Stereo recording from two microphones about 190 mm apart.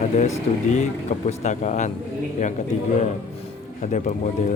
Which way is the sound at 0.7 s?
35° left (ahead or behind).